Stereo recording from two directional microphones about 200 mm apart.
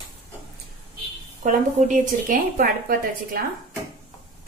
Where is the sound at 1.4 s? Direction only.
40° right (ahead or behind).